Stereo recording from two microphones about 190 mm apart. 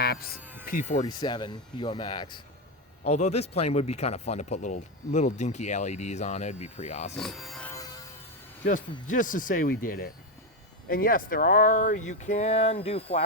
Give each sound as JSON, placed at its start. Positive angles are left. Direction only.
{"t": 0.0, "sound": "speech", "side_deg": 55}
{"t": 0.6, "sound": "speech", "side_deg": 45}
{"t": 1.0, "sound": "speech", "side_deg": 20}
{"t": 3.1, "sound": "speech", "side_deg": 35}
{"t": 7.2, "sound": "speech", "side_deg": 0}
{"t": 7.7, "sound": "music", "side_deg": 20}
{"t": 8.6, "sound": "speech", "side_deg": 45}